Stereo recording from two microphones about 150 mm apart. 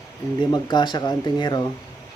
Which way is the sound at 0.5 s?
30° left (ahead or behind).